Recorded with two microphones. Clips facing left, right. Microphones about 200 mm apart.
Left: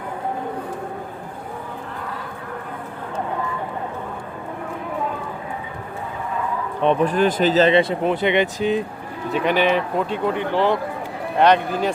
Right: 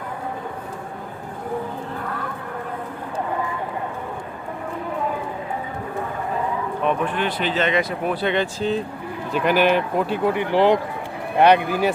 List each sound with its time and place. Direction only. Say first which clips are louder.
6.8 s speech: left 6 dB; 40° left (ahead or behind); by 8.8 s 15° left (ahead or behind)
9.3 s speech: right 1 dB; centre (ahead or behind)
10.5 s speech: right 5 dB; 15° right (ahead or behind)